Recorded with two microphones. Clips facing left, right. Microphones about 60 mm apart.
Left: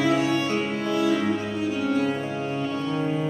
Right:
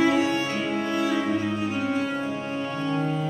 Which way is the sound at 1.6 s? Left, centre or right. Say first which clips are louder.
Left 2 dB; right.